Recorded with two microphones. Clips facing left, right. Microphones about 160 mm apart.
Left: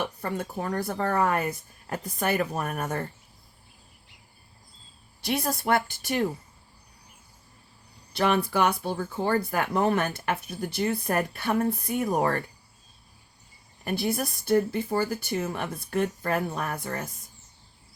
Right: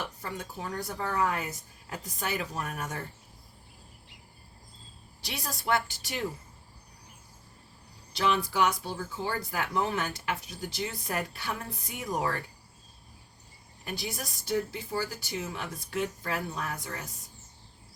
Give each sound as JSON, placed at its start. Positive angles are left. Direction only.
{"t": 0.0, "sound": "speech", "side_deg": 55}
{"t": 5.2, "sound": "a woman's voice", "side_deg": 50}
{"t": 8.1, "sound": "speech", "side_deg": 55}
{"t": 13.8, "sound": "speech", "side_deg": 55}